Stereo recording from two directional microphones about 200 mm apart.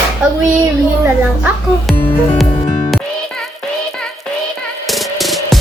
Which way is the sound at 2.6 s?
20° left (ahead or behind).